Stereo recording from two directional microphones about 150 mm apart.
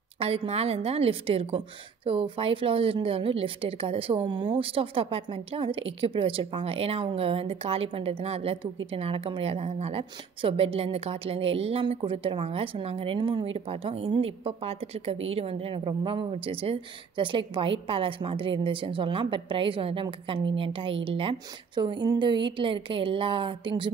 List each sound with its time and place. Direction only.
0.2 s a woman's voice: 40° right (ahead or behind)